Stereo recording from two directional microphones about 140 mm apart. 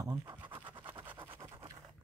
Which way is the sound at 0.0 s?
25° right (ahead or behind).